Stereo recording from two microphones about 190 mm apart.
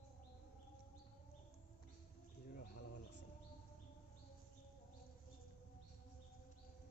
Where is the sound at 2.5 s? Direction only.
45° left (ahead or behind).